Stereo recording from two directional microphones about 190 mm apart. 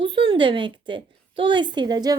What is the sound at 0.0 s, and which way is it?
A woman's voice, 25° right (ahead or behind).